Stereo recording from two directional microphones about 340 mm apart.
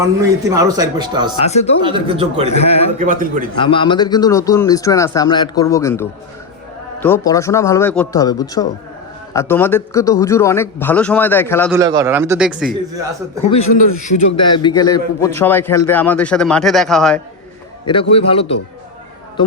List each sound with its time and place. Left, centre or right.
0.0 s a man's voice: centre
1.4 s a man's voice: centre
1.8 s a man's voice: centre
2.6 s speech: centre
3.0 s a man's voice: right
3.5 s speech: centre
11.7 s a man's voice: centre
13.5 s a man's voice: left; by 17.2 s centre
18.1 s speech: centre